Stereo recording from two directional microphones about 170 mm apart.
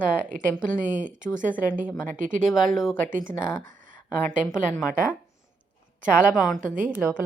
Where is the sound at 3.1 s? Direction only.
50° right (ahead or behind).